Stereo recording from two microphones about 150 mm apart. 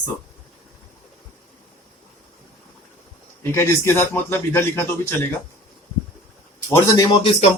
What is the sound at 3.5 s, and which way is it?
Speech, 15° left (ahead or behind).